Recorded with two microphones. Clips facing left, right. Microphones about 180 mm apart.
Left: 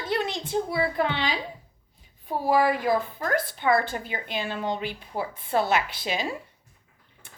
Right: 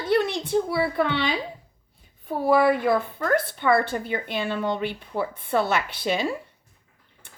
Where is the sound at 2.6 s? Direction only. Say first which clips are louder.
Right 3 dB; 60° right (ahead or behind).